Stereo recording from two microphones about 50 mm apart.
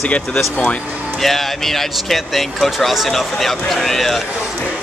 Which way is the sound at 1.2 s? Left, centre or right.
Centre.